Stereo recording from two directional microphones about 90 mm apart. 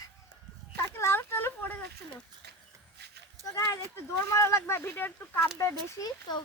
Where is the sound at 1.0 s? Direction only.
25° left (ahead or behind).